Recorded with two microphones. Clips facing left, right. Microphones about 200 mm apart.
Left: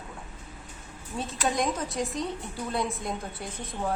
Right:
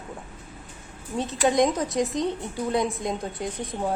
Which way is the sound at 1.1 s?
20° right (ahead or behind).